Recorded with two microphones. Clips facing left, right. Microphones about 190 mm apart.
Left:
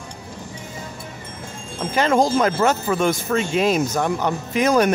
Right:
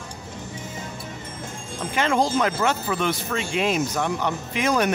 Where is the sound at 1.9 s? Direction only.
40° left (ahead or behind).